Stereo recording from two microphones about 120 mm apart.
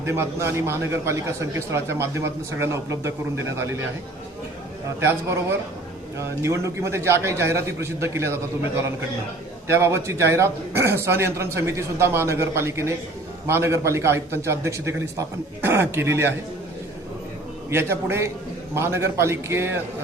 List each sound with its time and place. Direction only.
0.0 s speech: 20° right (ahead or behind)
4.9 s speech: 20° right (ahead or behind)
17.7 s speech: 20° right (ahead or behind)